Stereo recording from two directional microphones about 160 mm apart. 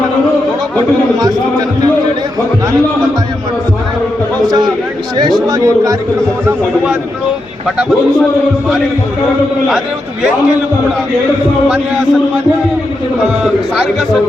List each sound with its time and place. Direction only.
5.5 s a man's voice: 20° right (ahead or behind)